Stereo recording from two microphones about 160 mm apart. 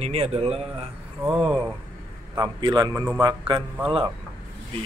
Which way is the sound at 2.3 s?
25° right (ahead or behind).